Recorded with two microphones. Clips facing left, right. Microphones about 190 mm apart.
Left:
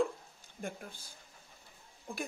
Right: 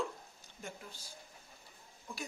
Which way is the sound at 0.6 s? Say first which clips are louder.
Left 6 dB; 55° left (ahead or behind).